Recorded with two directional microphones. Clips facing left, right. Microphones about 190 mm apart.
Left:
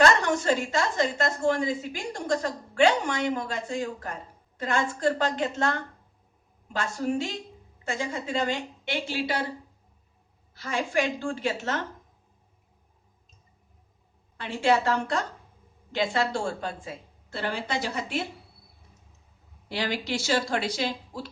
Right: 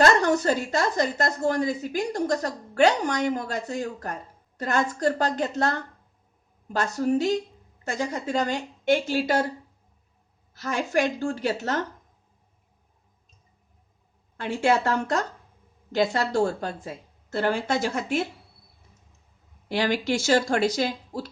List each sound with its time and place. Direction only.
0.0 s a woman's voice: 40° right (ahead or behind)
6.7 s a woman's voice: 40° right (ahead or behind)
10.6 s a woman's voice: 40° right (ahead or behind)
14.3 s a woman's voice: 45° right (ahead or behind)
19.6 s a woman's voice: 50° right (ahead or behind)